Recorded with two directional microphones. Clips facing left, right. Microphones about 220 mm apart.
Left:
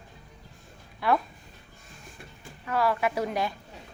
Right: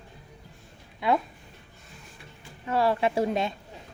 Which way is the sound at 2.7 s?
25° right (ahead or behind).